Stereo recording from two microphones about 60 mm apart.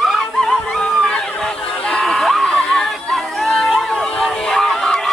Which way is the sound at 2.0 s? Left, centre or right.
Centre.